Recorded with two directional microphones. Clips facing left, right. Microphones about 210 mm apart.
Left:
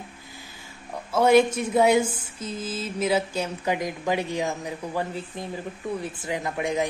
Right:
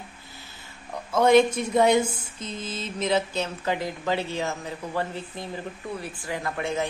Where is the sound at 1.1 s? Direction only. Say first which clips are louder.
Even; 5° left (ahead or behind).